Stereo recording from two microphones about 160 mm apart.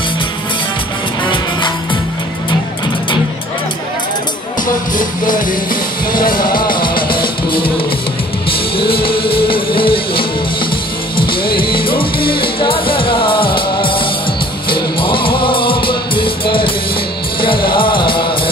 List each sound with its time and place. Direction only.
4.9 s music: 55° left (ahead or behind)
8.5 s music: 35° left (ahead or behind)